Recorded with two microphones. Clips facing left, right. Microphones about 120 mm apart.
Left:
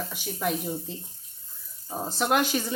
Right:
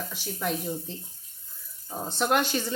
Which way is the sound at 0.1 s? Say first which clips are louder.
Left 1 dB; 10° left (ahead or behind).